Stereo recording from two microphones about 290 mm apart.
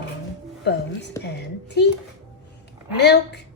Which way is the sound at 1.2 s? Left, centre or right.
Left.